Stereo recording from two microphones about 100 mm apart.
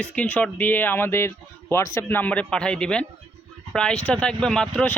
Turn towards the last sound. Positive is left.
turn(degrees=10)  # may be behind; listen again after turning